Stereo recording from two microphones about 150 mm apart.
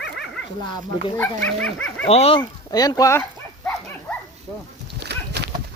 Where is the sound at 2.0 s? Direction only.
40° left (ahead or behind); by 3.2 s 15° left (ahead or behind).